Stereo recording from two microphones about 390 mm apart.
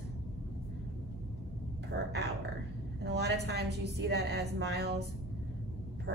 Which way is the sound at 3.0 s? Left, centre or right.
Right.